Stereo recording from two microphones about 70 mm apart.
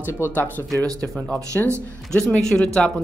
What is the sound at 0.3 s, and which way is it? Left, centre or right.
Speech, left.